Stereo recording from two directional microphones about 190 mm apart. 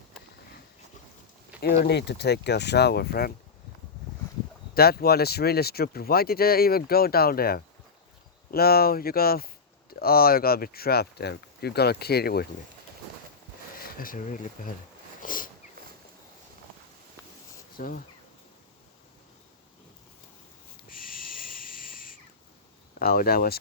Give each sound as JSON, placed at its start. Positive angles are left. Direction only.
{"t": 1.8, "sound": "speech", "side_deg": 60}
{"t": 4.7, "sound": "speech", "side_deg": 55}
{"t": 13.7, "sound": "speech", "side_deg": 45}
{"t": 15.2, "sound": "a sound", "side_deg": 45}
{"t": 17.7, "sound": "speech", "side_deg": 45}
{"t": 20.9, "sound": "owl", "side_deg": 50}
{"t": 23.0, "sound": "speech", "side_deg": 50}